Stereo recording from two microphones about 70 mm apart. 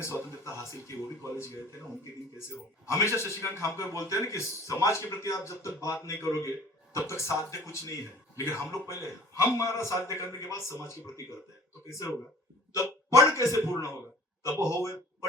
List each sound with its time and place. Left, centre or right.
0.0 s a man's voice: left
2.8 s a man's voice: left
12.7 s hiccup: left
13.2 s speech: left
14.6 s speech: left